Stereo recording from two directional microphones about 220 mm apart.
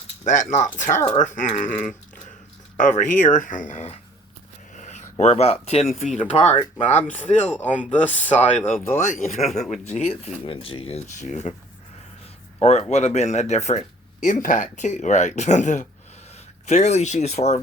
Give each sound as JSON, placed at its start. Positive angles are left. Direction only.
{"t": 0.5, "sound": "speech", "side_deg": 35}
{"t": 4.7, "sound": "a sound", "side_deg": 35}
{"t": 6.0, "sound": "speech", "side_deg": 30}
{"t": 7.6, "sound": "speech", "side_deg": 5}
{"t": 8.3, "sound": "speech", "side_deg": 30}
{"t": 12.5, "sound": "speech", "side_deg": 30}